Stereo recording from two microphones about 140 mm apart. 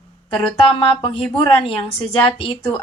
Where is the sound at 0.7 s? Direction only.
40° left (ahead or behind).